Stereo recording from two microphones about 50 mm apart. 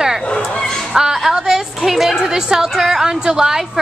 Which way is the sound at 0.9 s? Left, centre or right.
Centre.